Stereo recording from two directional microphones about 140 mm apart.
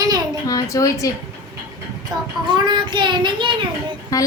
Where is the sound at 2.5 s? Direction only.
35° right (ahead or behind).